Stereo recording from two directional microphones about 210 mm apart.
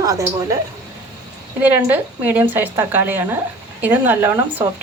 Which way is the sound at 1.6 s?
10° right (ahead or behind).